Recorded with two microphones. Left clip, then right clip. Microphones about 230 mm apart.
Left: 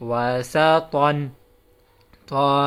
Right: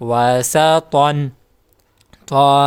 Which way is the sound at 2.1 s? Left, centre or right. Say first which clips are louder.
Right 8 dB; right.